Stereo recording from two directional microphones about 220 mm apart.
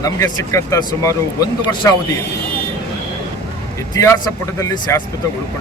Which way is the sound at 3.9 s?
15° left (ahead or behind).